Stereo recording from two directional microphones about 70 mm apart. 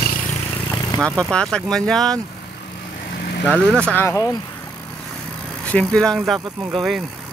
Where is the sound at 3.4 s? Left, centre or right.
Centre.